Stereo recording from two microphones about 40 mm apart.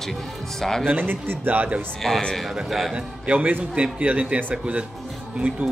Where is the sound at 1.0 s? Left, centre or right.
Right.